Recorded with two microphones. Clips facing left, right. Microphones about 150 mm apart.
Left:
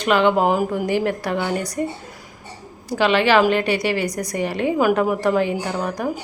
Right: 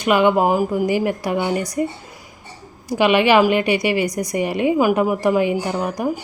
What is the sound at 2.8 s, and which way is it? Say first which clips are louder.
A woman's voice: right 2 dB; 15° right (ahead or behind).